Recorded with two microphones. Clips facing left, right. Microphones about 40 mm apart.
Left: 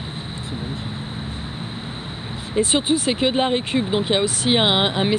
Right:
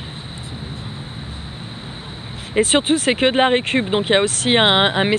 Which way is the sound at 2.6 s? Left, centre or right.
Right.